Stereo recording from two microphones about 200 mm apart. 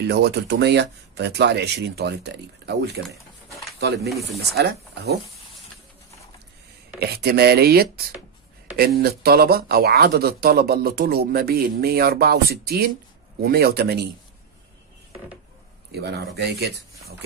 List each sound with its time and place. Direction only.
0.0 s speech: 55° right (ahead or behind)
7.0 s speech: 50° right (ahead or behind)
15.9 s speech: 55° right (ahead or behind)